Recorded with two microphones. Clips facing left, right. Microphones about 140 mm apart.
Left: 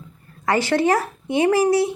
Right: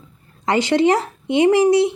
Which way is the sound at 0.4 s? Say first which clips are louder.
Right 3 dB; 20° right (ahead or behind).